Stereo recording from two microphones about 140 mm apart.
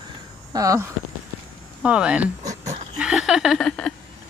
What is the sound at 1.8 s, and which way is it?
Speech, 10° right (ahead or behind).